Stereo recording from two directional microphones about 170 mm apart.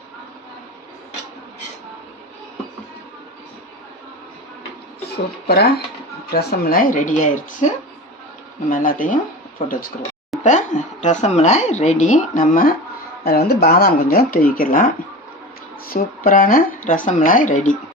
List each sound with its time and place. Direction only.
5.5 s speech: 70° left (ahead or behind); by 7.7 s 45° left (ahead or behind)
8.7 s speech: 50° left (ahead or behind)
10.4 s speech: 45° left (ahead or behind)
15.9 s speech: 55° left (ahead or behind)